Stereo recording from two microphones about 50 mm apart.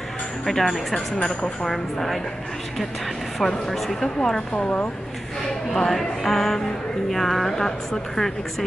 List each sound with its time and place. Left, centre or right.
0.5 s a woman's voice: centre
1.1 s speech: centre
3.6 s speech: centre
4.6 s a woman's voice: left
5.5 s a woman's voice: centre